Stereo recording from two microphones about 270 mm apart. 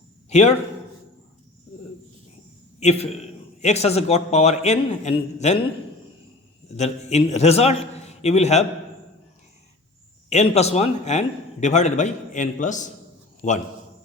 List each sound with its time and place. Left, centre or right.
0.3 s a man's voice: left
3.6 s a man's voice: left
6.7 s a man's voice: left
10.2 s a man's voice: left